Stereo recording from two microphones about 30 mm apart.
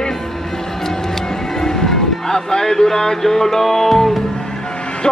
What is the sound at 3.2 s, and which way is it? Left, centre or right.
Music, centre.